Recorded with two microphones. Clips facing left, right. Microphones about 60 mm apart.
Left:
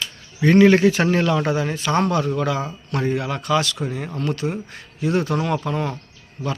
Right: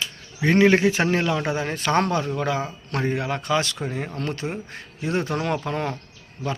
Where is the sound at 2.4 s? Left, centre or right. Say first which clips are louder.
Left 2 dB; right.